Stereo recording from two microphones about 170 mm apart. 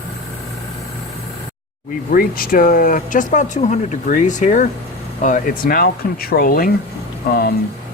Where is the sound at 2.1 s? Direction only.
60° left (ahead or behind).